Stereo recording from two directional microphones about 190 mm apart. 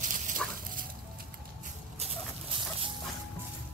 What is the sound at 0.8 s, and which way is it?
Patter, 50° right (ahead or behind).